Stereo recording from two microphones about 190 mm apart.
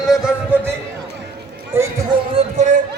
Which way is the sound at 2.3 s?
40° right (ahead or behind).